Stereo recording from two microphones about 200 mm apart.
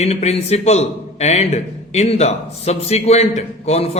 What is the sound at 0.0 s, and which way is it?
A man's voice, 30° left (ahead or behind).